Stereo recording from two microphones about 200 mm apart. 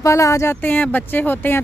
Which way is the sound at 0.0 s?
15° left (ahead or behind).